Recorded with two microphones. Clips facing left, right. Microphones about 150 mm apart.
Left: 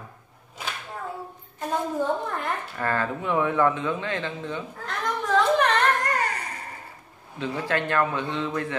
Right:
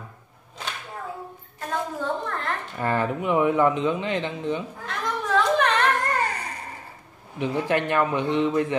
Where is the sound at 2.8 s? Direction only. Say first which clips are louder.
Right 3 dB; 15° right (ahead or behind).